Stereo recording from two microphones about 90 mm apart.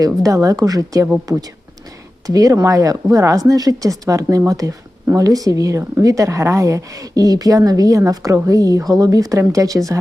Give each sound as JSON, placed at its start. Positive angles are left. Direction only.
{"t": 0.0, "sound": "speech", "side_deg": -40}
{"t": 2.2, "sound": "speech", "side_deg": -40}